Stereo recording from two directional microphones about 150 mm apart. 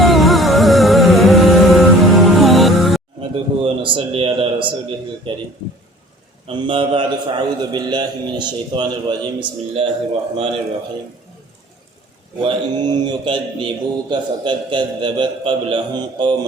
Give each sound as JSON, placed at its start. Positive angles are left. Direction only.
{"t": 0.0, "sound": "music", "side_deg": 0}
{"t": 3.2, "sound": "a sound", "side_deg": -35}
{"t": 5.3, "sound": "a man's voice", "side_deg": -35}
{"t": 6.5, "sound": "a man's voice", "side_deg": -35}
{"t": 12.4, "sound": "a man's voice", "side_deg": -30}